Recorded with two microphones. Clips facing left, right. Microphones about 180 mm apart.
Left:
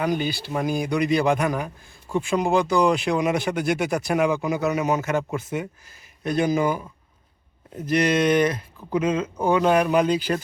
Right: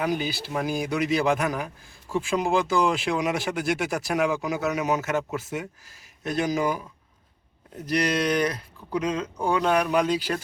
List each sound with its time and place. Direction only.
0.0 s speech: 5° right (ahead or behind)